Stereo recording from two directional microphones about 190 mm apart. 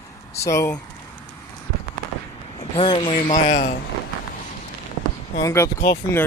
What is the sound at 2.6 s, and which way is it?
Speech, 30° left (ahead or behind).